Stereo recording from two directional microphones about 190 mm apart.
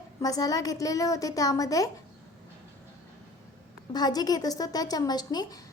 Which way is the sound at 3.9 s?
20° left (ahead or behind).